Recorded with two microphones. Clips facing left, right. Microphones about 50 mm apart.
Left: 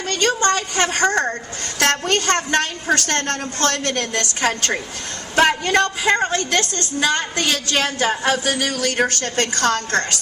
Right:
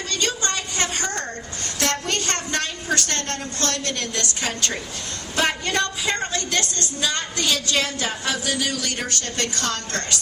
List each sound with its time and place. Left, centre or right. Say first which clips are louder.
0.1 s a woman's voice: left 8 dB; left
1.8 s a woman's voice: left 6 dB; left